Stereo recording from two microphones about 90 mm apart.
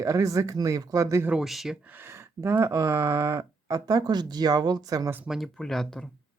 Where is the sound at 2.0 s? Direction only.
30° right (ahead or behind).